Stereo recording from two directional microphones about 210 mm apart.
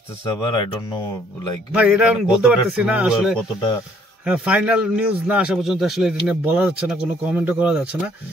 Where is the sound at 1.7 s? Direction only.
5° right (ahead or behind).